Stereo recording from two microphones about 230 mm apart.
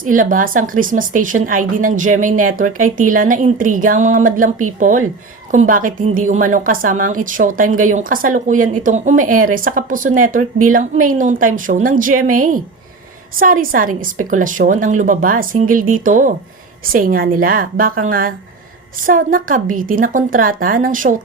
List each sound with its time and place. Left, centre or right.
0.0 s a woman's voice: right